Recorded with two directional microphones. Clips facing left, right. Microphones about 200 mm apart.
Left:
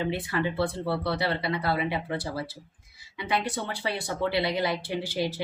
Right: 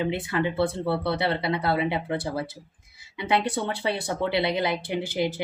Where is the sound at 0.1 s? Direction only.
20° right (ahead or behind).